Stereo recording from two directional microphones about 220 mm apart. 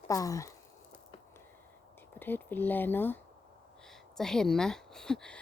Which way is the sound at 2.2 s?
10° left (ahead or behind).